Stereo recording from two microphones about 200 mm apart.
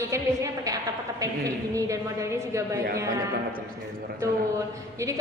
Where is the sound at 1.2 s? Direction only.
15° right (ahead or behind).